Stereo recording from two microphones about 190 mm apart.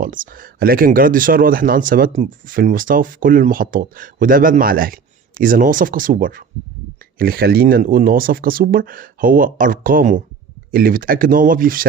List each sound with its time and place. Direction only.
0.0 s speech: 45° right (ahead or behind)